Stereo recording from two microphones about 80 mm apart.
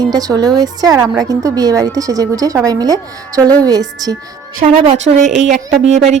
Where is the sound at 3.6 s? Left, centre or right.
Right.